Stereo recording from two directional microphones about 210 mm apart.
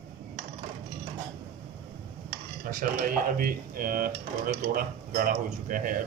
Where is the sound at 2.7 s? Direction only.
40° right (ahead or behind).